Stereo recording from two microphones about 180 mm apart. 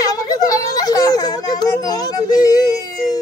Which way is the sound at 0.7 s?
20° left (ahead or behind).